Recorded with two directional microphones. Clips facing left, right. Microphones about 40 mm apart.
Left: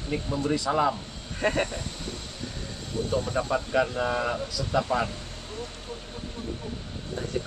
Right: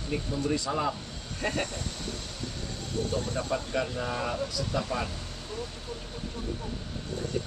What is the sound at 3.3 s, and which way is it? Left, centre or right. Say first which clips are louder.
Speech: left 5 dB; left.